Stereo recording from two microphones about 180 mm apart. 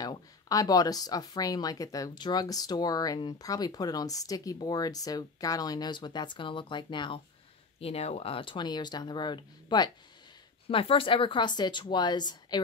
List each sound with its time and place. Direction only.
0.0 s speech: 20° left (ahead or behind)